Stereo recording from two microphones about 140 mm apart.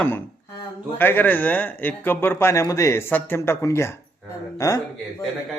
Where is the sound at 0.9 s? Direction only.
15° left (ahead or behind).